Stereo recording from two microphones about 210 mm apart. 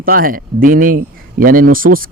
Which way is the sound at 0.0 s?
45° right (ahead or behind).